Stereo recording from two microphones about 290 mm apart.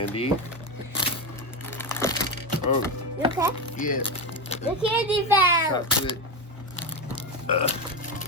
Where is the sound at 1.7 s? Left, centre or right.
Centre.